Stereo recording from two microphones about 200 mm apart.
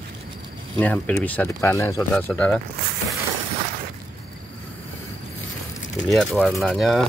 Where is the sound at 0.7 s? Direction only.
10° left (ahead or behind).